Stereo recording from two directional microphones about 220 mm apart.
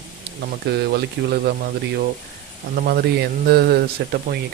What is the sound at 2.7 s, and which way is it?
Speech, 45° right (ahead or behind).